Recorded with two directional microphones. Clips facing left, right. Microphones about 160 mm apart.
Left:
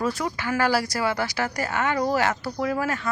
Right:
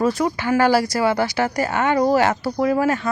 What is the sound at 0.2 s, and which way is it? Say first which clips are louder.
Speech: right 7 dB; 25° right (ahead or behind).